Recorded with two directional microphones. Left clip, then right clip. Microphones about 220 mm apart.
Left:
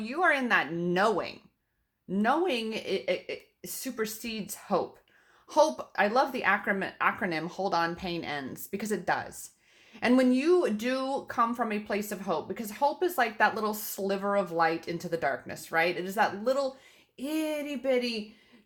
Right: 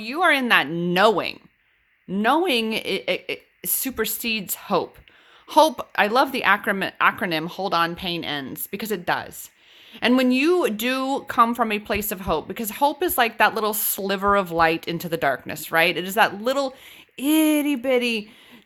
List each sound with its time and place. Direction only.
0.0 s speech: 25° right (ahead or behind); by 18.1 s 45° right (ahead or behind)